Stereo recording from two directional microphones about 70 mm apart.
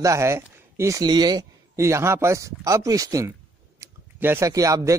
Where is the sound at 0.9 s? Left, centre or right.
Right.